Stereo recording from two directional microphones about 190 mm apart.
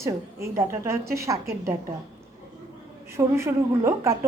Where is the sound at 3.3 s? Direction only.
15° right (ahead or behind).